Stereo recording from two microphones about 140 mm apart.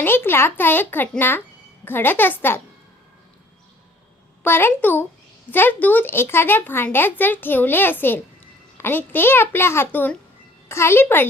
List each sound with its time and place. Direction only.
0.0 s speech: 15° left (ahead or behind)
4.4 s speech: 15° left (ahead or behind)